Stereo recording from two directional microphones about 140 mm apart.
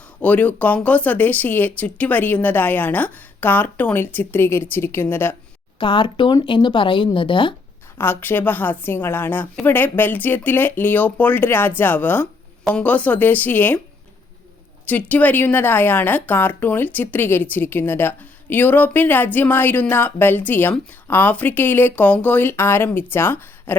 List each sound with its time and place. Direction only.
0.2 s a woman's voice: 10° left (ahead or behind)
5.8 s speech: 35° left (ahead or behind)
7.9 s a woman's voice: 15° left (ahead or behind)
14.8 s a woman's voice: 10° left (ahead or behind)